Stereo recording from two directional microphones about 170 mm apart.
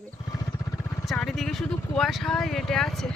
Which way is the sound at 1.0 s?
5° left (ahead or behind).